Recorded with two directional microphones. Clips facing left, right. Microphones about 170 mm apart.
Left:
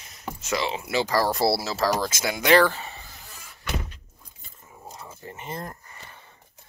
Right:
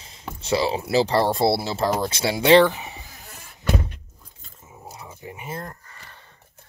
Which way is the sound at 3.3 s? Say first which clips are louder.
Right 7 dB; 50° right (ahead or behind).